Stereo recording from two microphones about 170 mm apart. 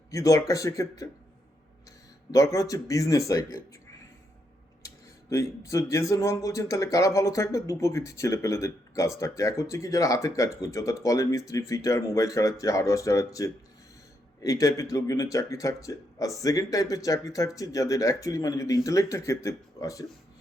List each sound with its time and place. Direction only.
0.1 s speech: 20° left (ahead or behind)
2.3 s speech: 20° left (ahead or behind)
5.3 s speech: 20° left (ahead or behind)